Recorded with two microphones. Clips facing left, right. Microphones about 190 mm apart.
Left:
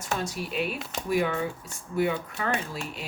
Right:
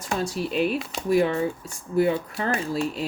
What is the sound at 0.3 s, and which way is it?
Speech, 35° right (ahead or behind).